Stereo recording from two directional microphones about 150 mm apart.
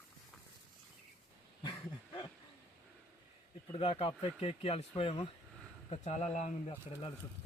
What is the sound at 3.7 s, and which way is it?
A man's voice, 40° left (ahead or behind).